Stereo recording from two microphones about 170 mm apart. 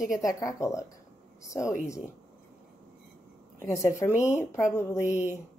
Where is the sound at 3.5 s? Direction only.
15° left (ahead or behind).